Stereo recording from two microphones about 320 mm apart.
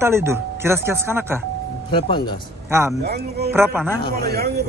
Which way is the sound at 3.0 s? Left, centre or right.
Right.